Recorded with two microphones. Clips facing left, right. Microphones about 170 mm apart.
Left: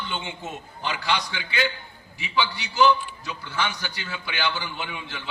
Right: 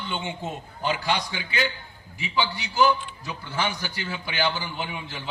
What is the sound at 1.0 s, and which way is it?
Speech, 45° right (ahead or behind).